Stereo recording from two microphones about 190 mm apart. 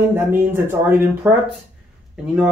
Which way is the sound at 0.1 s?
10° right (ahead or behind).